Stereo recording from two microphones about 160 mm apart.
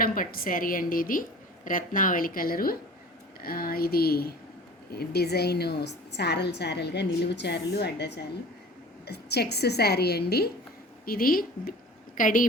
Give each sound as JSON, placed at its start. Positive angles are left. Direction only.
{"t": 0.0, "sound": "a woman's voice", "side_deg": 65}
{"t": 11.0, "sound": "a woman's voice", "side_deg": 65}